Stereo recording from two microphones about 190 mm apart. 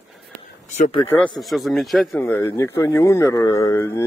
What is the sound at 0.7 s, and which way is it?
Speech, 35° left (ahead or behind).